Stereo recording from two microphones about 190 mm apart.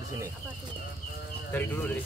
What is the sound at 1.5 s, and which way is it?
Speech, 10° left (ahead or behind).